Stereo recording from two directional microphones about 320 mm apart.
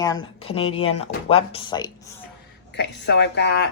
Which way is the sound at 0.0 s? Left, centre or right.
Centre.